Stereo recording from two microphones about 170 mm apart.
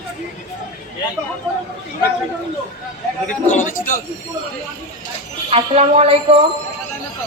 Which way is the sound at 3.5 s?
50° left (ahead or behind).